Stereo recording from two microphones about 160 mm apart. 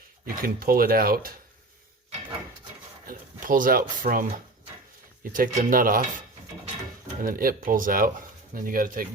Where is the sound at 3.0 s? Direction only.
60° right (ahead or behind).